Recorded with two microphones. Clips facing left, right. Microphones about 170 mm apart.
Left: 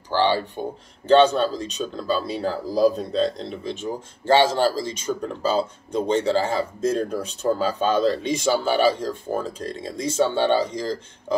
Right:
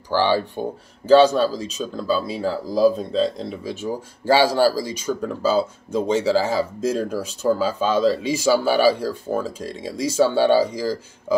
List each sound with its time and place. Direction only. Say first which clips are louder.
0.1 s speech: right 2 dB; 10° right (ahead or behind)